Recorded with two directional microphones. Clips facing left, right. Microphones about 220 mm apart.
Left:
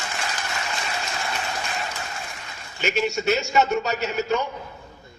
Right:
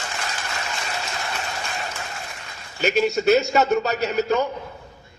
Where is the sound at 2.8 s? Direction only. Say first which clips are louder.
Right 4 dB; 35° right (ahead or behind).